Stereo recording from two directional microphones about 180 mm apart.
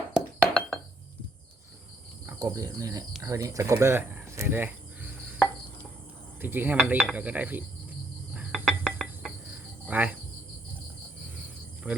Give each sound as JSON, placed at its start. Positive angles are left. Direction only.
{"t": 0.1, "sound": "a sound", "side_deg": 5}
{"t": 2.2, "sound": "speech", "side_deg": -20}
{"t": 6.4, "sound": "speech", "side_deg": -10}
{"t": 8.3, "sound": "cricket", "side_deg": -5}
{"t": 11.9, "sound": "speech", "side_deg": -5}